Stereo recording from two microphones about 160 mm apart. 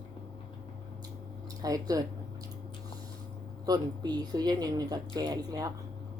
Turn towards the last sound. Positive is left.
turn(degrees=-25)  # may be behind; listen again after turning